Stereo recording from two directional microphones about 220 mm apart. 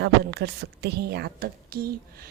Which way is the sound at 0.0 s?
50° right (ahead or behind).